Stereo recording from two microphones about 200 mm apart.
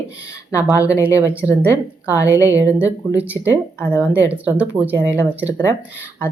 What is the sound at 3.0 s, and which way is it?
Speech, 15° right (ahead or behind).